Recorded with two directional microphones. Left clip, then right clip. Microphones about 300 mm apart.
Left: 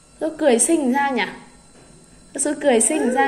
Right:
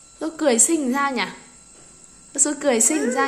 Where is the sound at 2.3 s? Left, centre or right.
Centre.